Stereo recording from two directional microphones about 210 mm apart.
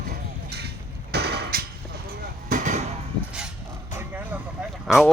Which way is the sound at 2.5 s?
35° right (ahead or behind).